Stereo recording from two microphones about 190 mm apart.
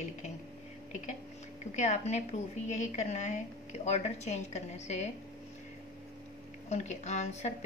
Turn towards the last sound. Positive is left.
turn(degrees=40)  # may be behind; listen again after turning